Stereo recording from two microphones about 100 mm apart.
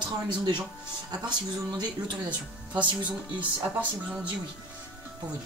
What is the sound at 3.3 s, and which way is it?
Speech, 15° right (ahead or behind).